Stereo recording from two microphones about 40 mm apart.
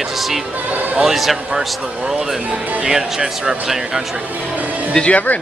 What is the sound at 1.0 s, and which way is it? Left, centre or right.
Speech, centre.